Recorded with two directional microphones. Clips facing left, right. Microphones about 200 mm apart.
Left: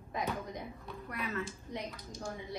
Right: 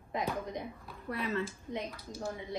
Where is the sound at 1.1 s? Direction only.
30° right (ahead or behind).